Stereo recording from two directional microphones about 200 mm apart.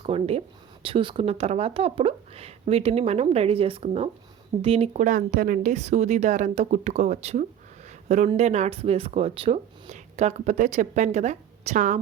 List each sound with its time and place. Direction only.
0.0 s speech: 30° right (ahead or behind)